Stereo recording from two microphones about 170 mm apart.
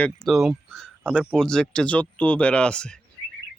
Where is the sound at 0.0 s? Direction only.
Centre (ahead or behind).